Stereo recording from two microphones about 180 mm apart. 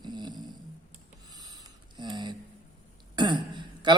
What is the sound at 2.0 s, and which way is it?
A man's voice, 25° right (ahead or behind).